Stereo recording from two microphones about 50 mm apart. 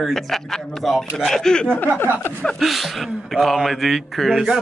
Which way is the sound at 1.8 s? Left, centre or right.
Left.